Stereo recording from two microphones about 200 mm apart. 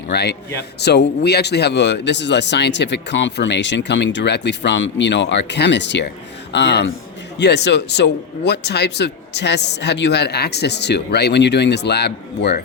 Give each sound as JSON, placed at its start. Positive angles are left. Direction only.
{"t": 0.1, "sound": "speech", "side_deg": 55}